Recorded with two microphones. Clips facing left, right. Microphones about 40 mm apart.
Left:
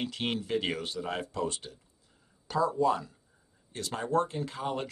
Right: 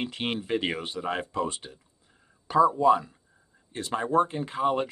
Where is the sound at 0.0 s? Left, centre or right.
Right.